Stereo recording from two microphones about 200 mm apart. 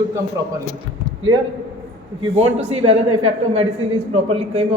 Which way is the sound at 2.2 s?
30° right (ahead or behind).